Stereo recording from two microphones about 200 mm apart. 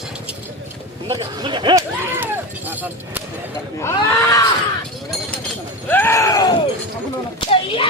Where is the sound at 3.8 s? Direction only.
15° left (ahead or behind).